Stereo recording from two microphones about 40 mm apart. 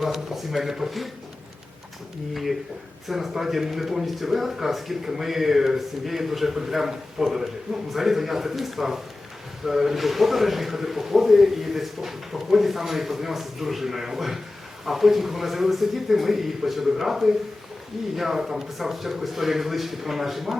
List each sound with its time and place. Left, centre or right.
0.0 s speech: centre
2.3 s speech: centre